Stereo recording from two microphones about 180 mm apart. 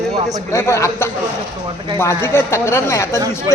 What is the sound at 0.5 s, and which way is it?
A man's voice, 15° left (ahead or behind).